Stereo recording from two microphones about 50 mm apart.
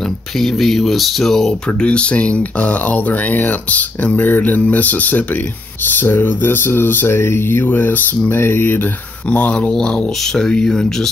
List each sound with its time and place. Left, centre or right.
0.4 s speech: centre
1.8 s speech: left
5.9 s a sound: left
8.3 s a sound: left
9.3 s speech: left
9.7 s speech: centre